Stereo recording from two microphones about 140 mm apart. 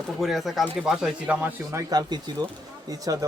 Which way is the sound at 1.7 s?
25° right (ahead or behind).